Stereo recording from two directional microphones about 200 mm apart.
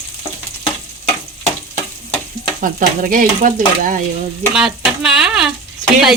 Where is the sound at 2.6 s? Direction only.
45° right (ahead or behind).